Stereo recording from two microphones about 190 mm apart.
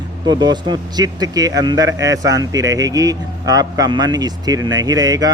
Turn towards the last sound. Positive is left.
turn(degrees=-20)  # may be behind; listen again after turning